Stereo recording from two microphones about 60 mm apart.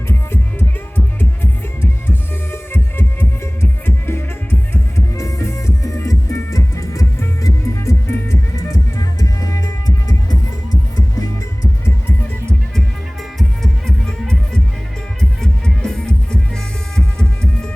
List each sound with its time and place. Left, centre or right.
0.9 s music: left
5.1 s music: left
13.6 s music: centre